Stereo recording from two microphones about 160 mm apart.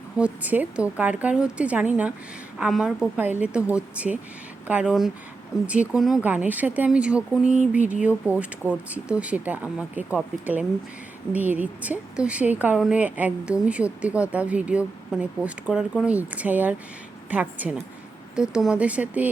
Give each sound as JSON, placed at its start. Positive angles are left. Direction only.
{"t": 0.2, "sound": "a woman's voice", "side_deg": -10}